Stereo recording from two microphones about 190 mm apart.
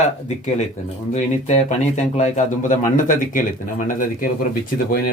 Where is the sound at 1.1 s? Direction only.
40° left (ahead or behind).